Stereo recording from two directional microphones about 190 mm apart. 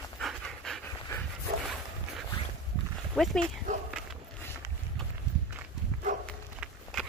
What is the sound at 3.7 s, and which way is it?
Walk, 40° right (ahead or behind).